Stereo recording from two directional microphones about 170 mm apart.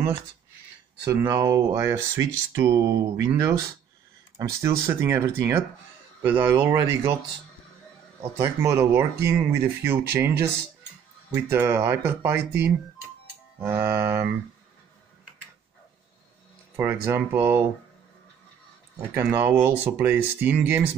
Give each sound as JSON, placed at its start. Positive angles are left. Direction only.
{"t": 1.2, "sound": "speech", "side_deg": -20}
{"t": 8.4, "sound": "speech", "side_deg": -15}
{"t": 16.7, "sound": "speech", "side_deg": -15}
{"t": 18.9, "sound": "speech", "side_deg": -15}